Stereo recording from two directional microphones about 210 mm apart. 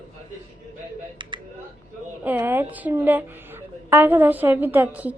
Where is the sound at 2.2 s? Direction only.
10° right (ahead or behind).